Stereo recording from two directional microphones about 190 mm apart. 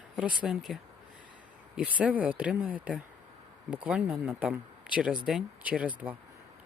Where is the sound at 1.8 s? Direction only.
5° right (ahead or behind).